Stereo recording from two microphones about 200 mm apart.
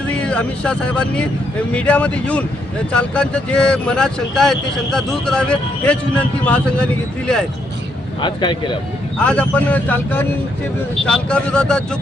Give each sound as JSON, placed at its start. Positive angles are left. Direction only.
{"t": 0.1, "sound": "speech", "side_deg": 5}
{"t": 8.2, "sound": "speech", "side_deg": 25}
{"t": 9.1, "sound": "speech", "side_deg": 5}